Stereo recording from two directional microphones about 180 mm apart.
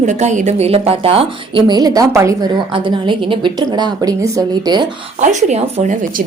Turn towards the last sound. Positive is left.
turn(degrees=-45)  # may be behind; listen again after turning